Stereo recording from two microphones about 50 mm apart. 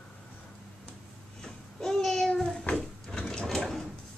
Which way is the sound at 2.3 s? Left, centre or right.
Centre.